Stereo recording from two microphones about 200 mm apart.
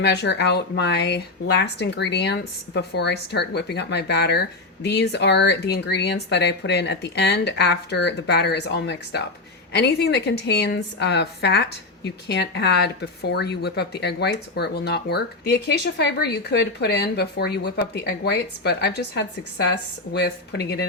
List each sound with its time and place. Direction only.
0.0 s a woman's voice: 55° left (ahead or behind)